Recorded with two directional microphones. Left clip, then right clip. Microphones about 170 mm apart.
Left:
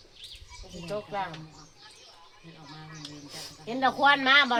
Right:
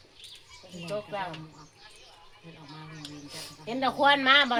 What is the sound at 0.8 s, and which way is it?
Speech, 5° left (ahead or behind).